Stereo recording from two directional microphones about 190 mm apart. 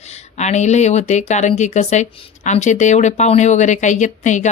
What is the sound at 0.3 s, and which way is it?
Speech, 35° left (ahead or behind).